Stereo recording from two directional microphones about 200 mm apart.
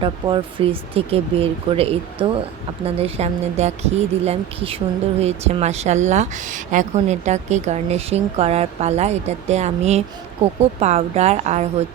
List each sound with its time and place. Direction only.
0.0 s a woman's voice: 25° right (ahead or behind)